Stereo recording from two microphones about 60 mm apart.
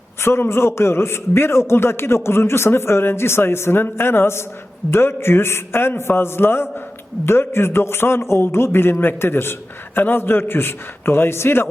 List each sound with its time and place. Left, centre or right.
0.2 s a man's voice: left